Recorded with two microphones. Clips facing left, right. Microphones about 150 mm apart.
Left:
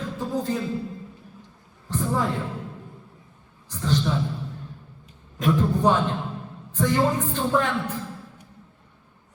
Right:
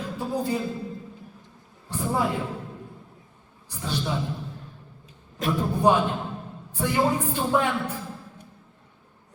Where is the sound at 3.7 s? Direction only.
10° right (ahead or behind).